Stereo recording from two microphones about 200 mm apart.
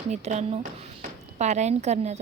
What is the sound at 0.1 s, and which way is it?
Speech, 35° right (ahead or behind).